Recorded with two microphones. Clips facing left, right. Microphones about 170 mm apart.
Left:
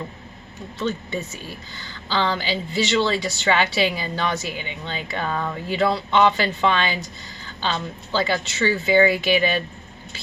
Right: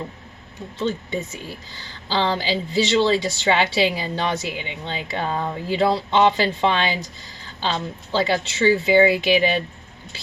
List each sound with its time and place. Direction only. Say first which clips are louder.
0.9 s speech: right 1 dB; 20° right (ahead or behind)